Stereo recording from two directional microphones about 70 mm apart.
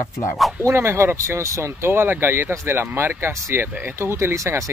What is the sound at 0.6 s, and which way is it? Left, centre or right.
Speech, right.